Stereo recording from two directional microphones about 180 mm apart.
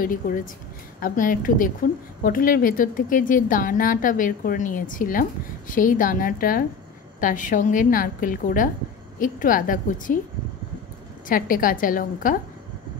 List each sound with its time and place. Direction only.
0.0 s a woman's voice: 50° left (ahead or behind)
11.2 s a woman's voice: 50° left (ahead or behind)